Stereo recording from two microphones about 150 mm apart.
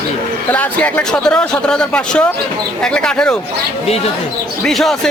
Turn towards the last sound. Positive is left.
turn(degrees=0)  # may be behind; listen again after turning